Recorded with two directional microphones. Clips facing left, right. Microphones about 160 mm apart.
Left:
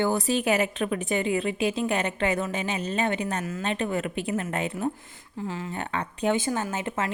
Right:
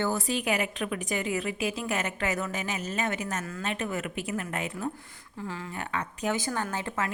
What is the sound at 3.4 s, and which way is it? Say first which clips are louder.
Speech: left 5 dB; 20° left (ahead or behind).